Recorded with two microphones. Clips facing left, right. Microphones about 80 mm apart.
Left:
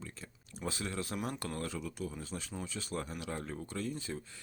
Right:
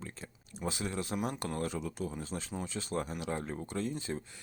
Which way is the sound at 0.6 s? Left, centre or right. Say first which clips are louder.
Right 2 dB; centre.